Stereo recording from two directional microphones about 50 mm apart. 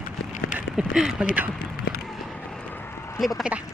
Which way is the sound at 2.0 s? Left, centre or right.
Centre.